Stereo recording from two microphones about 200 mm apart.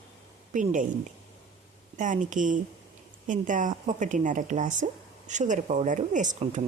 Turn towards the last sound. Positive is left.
turn(degrees=-40)  # may be behind; listen again after turning